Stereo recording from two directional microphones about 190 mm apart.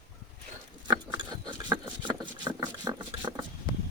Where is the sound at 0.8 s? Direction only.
25° right (ahead or behind).